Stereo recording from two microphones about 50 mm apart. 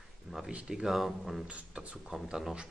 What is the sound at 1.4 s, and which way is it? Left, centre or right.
Speech, right.